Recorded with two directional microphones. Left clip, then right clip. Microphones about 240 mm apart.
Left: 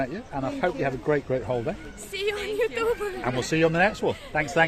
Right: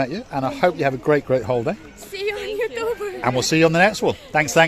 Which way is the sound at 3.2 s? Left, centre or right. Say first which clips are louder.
Right 7 dB; right.